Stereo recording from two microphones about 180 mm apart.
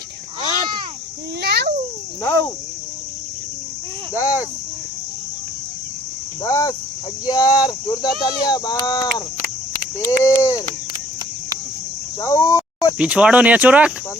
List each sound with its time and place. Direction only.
1.4 s cricket: 65° right (ahead or behind)
2.2 s speech: 15° left (ahead or behind)
4.1 s speech: 20° left (ahead or behind)
6.4 s speech: 20° left (ahead or behind)
12.2 s cricket: 20° left (ahead or behind)
13.0 s speech: 5° right (ahead or behind)